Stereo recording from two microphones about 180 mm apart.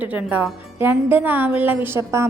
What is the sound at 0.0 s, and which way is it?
A woman's voice, 10° right (ahead or behind).